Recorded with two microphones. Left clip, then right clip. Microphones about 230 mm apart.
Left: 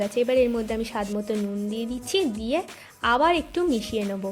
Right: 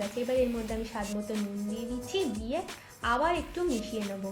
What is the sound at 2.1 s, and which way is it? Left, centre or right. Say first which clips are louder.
A woman's voice: left 8 dB; left.